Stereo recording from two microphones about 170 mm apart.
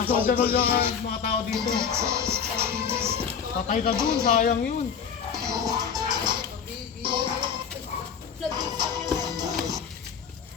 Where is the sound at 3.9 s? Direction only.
15° right (ahead or behind).